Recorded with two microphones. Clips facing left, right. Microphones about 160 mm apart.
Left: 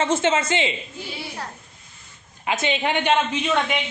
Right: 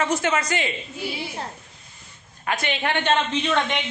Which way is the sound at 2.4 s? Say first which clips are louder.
Left 2 dB; 20° left (ahead or behind).